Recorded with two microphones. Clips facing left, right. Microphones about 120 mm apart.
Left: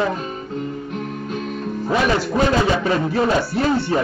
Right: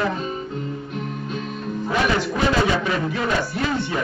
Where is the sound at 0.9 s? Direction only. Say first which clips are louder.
Left 2 dB; 50° left (ahead or behind).